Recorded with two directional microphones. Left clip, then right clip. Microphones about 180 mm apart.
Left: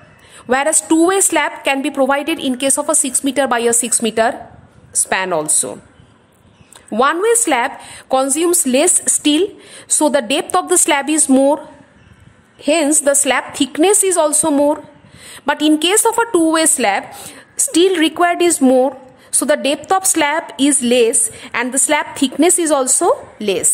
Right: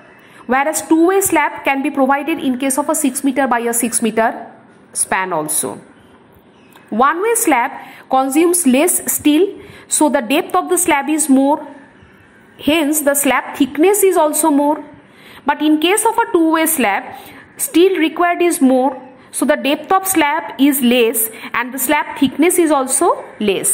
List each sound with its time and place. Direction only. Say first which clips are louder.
0.5 s a woman's voice: even; 35° left (ahead or behind)
7.0 s a woman's voice: even; 30° left (ahead or behind)
8.5 s a woman's voice: even; 20° left (ahead or behind)
9.1 s a woman's voice: right 1 dB; 40° left (ahead or behind)
12.5 s a woman's voice: left 1 dB; 15° left (ahead or behind)
13.0 s a woman's voice: even; 30° left (ahead or behind)